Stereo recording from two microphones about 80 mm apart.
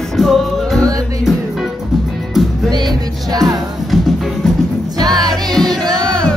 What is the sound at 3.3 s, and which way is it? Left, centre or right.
Music, right.